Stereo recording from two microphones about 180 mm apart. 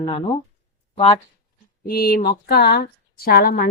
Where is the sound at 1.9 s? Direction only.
60° left (ahead or behind).